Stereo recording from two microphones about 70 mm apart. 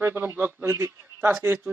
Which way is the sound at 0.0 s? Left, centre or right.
Right.